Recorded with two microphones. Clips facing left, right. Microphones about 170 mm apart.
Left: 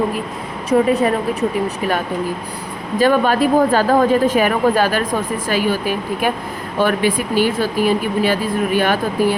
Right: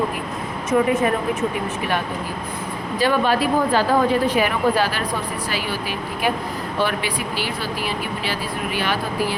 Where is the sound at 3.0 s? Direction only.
45° left (ahead or behind).